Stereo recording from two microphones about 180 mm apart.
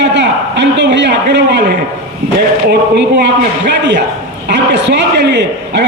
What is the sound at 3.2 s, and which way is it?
A man's voice, 75° right (ahead or behind).